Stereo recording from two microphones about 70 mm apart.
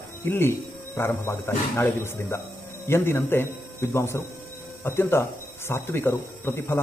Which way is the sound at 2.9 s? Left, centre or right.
Left.